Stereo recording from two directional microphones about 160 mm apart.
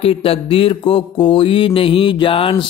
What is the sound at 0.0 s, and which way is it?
Mantra, 35° left (ahead or behind).